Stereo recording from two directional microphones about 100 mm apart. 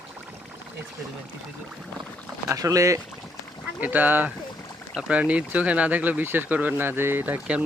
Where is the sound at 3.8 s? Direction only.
15° right (ahead or behind).